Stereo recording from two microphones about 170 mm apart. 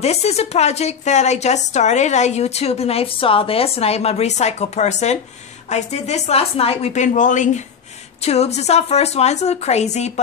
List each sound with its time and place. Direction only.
0.0 s a woman's voice: 40° left (ahead or behind)